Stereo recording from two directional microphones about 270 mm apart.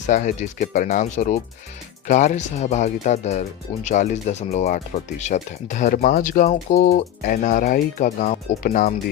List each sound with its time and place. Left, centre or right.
0.1 s speech: left